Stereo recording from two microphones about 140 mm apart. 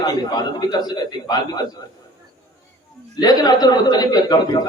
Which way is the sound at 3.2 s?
30° left (ahead or behind).